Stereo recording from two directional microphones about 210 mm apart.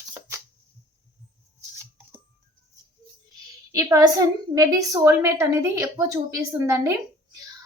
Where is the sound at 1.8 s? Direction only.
10° right (ahead or behind).